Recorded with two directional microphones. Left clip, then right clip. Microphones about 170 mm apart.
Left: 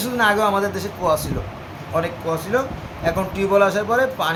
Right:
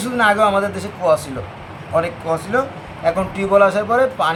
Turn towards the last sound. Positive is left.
turn(degrees=-10)  # may be behind; listen again after turning